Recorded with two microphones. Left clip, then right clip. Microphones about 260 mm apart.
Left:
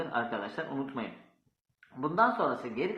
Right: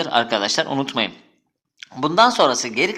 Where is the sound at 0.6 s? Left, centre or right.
Right.